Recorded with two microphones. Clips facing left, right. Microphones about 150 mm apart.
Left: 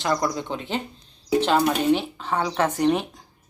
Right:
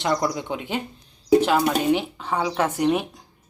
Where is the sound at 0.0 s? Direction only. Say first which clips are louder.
Right 1 dB; 20° right (ahead or behind).